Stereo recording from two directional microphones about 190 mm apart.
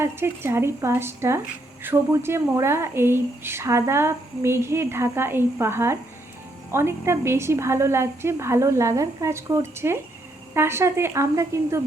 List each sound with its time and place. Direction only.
0.0 s a woman's voice: 15° right (ahead or behind)